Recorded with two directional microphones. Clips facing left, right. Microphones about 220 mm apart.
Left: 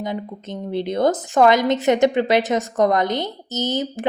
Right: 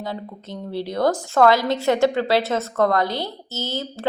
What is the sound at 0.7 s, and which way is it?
A woman's voice, 20° left (ahead or behind).